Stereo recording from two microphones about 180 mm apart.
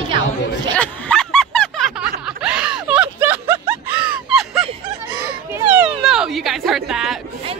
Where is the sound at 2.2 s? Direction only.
5° right (ahead or behind).